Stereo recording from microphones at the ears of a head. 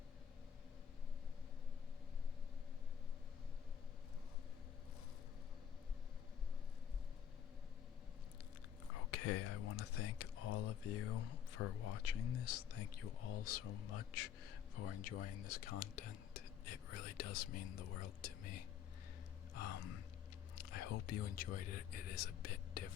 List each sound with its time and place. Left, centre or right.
8.9 s speech: left